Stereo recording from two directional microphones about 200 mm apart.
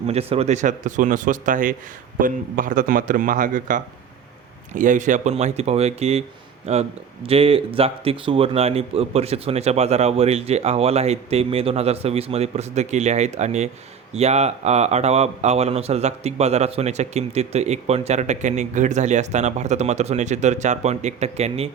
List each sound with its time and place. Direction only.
0.1 s speech: 30° right (ahead or behind)